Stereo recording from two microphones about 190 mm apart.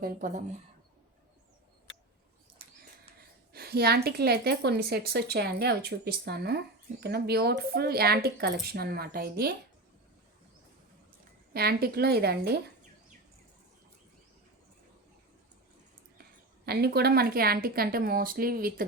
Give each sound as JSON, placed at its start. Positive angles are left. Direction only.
{"t": 0.0, "sound": "speech", "side_deg": -45}
{"t": 3.5, "sound": "a woman's voice", "side_deg": -55}
{"t": 11.5, "sound": "a woman's voice", "side_deg": -55}
{"t": 16.6, "sound": "speech", "side_deg": -55}